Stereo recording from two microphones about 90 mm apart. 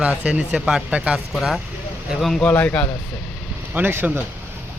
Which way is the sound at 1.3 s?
5° right (ahead or behind).